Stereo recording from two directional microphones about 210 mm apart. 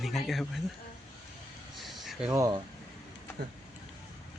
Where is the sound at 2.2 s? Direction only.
15° right (ahead or behind).